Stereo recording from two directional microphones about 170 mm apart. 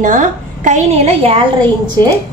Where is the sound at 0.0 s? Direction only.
50° right (ahead or behind); by 1.5 s 35° right (ahead or behind).